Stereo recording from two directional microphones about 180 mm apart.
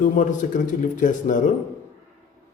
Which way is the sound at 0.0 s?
45° left (ahead or behind).